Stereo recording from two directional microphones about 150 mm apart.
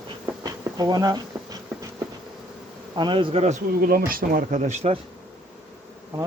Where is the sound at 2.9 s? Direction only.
30° right (ahead or behind).